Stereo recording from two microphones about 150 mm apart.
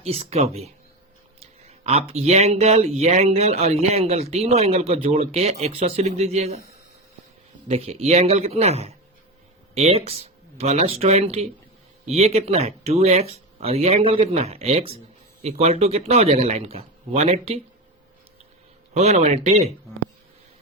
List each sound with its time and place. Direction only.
0.0 s speech: 45° right (ahead or behind)
7.7 s speech: 40° right (ahead or behind)
18.9 s speech: 50° right (ahead or behind)